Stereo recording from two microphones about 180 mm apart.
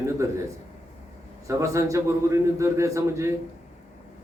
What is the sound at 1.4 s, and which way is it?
Speech, 15° right (ahead or behind).